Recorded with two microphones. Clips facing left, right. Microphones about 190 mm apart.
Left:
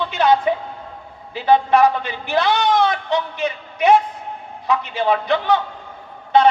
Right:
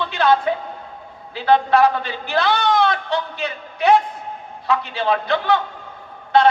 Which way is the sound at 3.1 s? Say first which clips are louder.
Left 3 dB; 20° left (ahead or behind).